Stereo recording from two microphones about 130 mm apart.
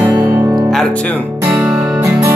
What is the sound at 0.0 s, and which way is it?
Music, 25° right (ahead or behind).